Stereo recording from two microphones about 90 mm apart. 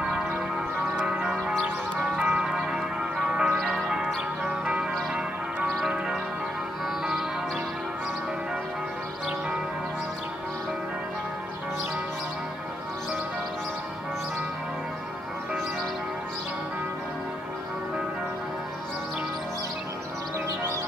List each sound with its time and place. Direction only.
0.9 s change ringing: 20° right (ahead or behind)
1.2 s music: 5° right (ahead or behind)
2.0 s change ringing: 10° right (ahead or behind)
3.7 s music: 5° right (ahead or behind)
5.7 s church bell: 5° right (ahead or behind)